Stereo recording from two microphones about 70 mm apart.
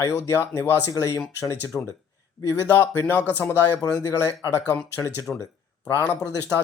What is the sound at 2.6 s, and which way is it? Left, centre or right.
Speech, left.